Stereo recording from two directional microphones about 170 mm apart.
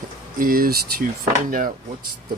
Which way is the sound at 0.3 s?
55° right (ahead or behind).